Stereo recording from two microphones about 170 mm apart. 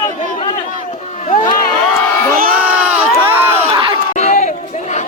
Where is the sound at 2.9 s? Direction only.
10° right (ahead or behind).